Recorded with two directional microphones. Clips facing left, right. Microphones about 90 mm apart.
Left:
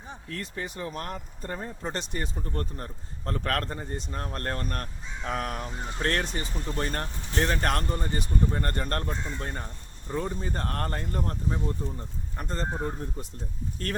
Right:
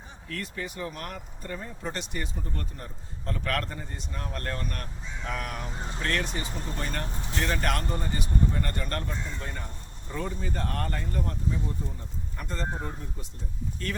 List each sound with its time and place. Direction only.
0.3 s speech: 30° left (ahead or behind)
13.8 s speech: 40° left (ahead or behind)